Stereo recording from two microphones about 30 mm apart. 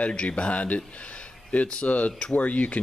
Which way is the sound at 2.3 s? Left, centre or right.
Left.